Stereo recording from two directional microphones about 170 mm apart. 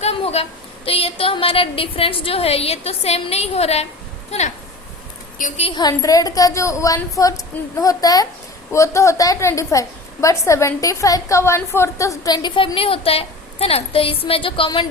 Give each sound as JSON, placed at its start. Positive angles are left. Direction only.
{"t": 0.0, "sound": "a sound", "side_deg": 35}
{"t": 0.9, "sound": "a woman's voice", "side_deg": 35}
{"t": 5.7, "sound": "a woman's voice", "side_deg": 20}